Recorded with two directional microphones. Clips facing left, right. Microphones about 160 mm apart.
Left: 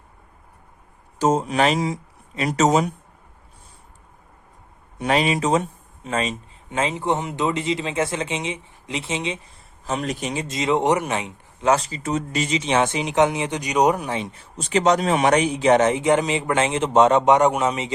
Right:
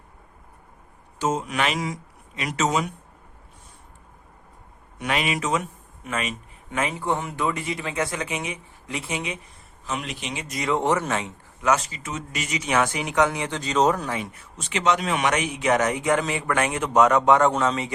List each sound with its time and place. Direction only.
1.2 s speech: 35° left (ahead or behind)
4.9 s speech: 35° left (ahead or behind)
9.8 s speech: 35° left (ahead or behind)
10.4 s speech: 25° left (ahead or behind)
11.7 s speech: 35° left (ahead or behind); by 14.1 s 15° left (ahead or behind)
14.1 s speech: 30° left (ahead or behind)